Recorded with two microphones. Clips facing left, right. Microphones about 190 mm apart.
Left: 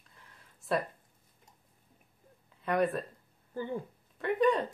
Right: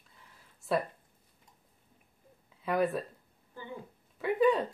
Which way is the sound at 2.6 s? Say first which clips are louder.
Even; centre (ahead or behind).